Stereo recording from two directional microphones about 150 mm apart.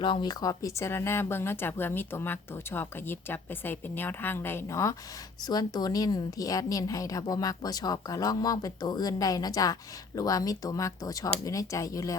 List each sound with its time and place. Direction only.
0.0 s a woman's voice: 30° left (ahead or behind)